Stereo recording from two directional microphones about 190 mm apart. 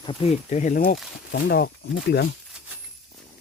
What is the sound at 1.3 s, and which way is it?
Speech, 55° left (ahead or behind).